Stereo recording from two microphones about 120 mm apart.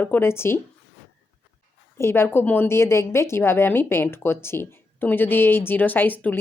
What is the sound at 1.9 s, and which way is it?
A woman's voice, 20° left (ahead or behind).